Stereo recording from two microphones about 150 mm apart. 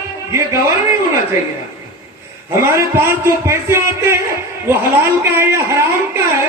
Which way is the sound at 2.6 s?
15° right (ahead or behind).